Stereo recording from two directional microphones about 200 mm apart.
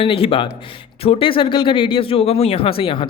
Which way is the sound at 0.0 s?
25° left (ahead or behind).